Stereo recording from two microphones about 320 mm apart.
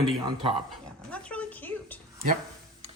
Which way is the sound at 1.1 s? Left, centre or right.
Centre.